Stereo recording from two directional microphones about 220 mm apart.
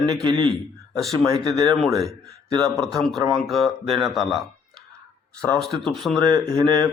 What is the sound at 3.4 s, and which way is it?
A man's voice, centre (ahead or behind).